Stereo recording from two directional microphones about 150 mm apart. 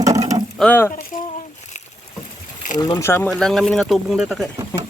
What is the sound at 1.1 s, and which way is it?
Speech, 60° left (ahead or behind).